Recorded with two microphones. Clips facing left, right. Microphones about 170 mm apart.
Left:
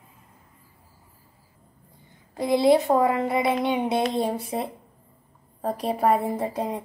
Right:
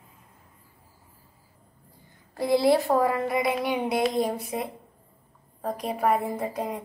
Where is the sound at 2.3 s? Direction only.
20° left (ahead or behind).